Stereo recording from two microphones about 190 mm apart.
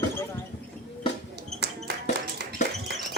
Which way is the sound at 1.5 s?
60° right (ahead or behind).